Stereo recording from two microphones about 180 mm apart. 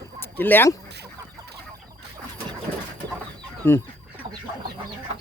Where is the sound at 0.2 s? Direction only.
10° left (ahead or behind).